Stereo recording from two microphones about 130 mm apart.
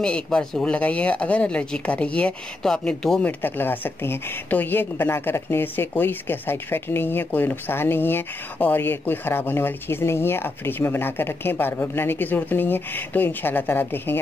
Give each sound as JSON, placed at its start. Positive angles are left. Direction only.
{"t": 0.0, "sound": "speech", "side_deg": 5}